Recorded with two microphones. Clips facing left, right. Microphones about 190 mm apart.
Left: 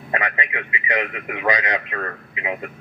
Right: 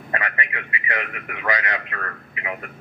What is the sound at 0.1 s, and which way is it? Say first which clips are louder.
A man's voice: left 3 dB; 20° left (ahead or behind).